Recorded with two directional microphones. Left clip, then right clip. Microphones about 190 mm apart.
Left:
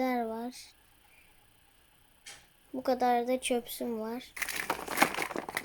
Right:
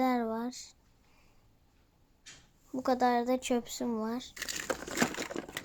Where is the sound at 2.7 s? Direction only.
5° right (ahead or behind).